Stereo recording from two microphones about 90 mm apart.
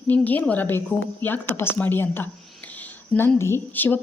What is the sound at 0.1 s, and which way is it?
Speech, 20° left (ahead or behind).